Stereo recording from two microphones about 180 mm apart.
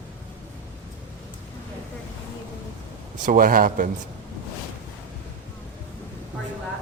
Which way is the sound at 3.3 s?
50° right (ahead or behind).